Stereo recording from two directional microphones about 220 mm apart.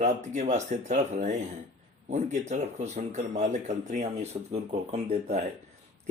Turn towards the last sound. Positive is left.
turn(degrees=-30)  # may be behind; listen again after turning